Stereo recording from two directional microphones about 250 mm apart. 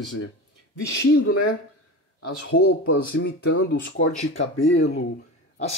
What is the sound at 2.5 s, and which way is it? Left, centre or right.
Speech, left.